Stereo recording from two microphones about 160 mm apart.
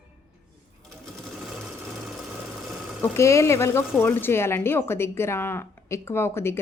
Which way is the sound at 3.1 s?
20° left (ahead or behind).